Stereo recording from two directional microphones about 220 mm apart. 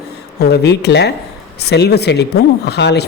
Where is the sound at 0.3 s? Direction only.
50° left (ahead or behind).